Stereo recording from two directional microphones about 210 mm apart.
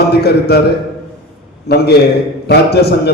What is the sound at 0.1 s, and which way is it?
Speech, 50° left (ahead or behind).